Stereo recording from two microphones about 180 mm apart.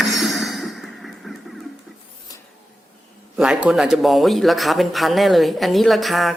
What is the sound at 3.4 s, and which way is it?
Speech, 5° right (ahead or behind).